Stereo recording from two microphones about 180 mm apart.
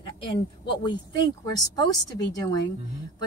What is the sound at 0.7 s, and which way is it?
Speech, 25° left (ahead or behind).